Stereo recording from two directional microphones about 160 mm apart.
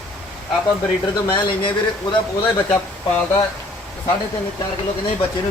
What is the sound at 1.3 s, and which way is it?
Speech, 30° left (ahead or behind).